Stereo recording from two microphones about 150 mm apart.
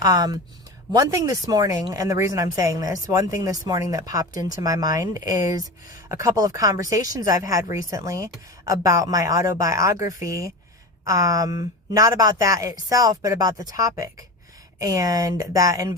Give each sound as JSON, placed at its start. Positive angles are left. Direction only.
{"t": 0.0, "sound": "speech", "side_deg": -25}